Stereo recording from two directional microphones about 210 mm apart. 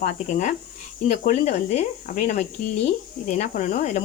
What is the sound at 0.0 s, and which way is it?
Speech, 35° left (ahead or behind).